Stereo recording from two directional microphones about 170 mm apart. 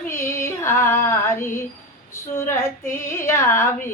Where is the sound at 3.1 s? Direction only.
15° left (ahead or behind).